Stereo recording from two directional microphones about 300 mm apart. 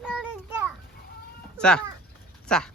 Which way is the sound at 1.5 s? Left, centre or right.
Centre.